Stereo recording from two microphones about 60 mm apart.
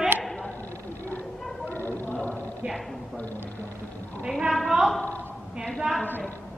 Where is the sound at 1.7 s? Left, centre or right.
Left.